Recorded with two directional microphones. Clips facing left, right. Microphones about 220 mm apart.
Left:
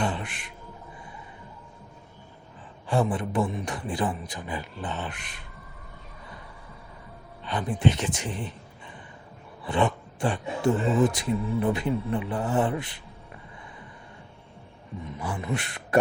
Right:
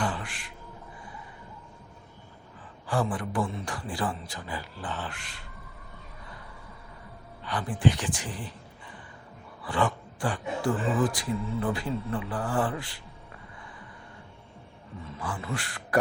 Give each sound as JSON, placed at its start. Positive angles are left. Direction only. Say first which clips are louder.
{"t": 0.0, "sound": "a sound", "louder": "left 2 dB", "side_deg": 25}
{"t": 2.8, "sound": "speech", "louder": "left 3 dB", "side_deg": 25}
{"t": 7.4, "sound": "speech", "louder": "left 1 dB", "side_deg": 20}
{"t": 9.6, "sound": "speech", "louder": "left 3 dB", "side_deg": 20}
{"t": 15.0, "sound": "speech", "louder": "left 3 dB", "side_deg": 20}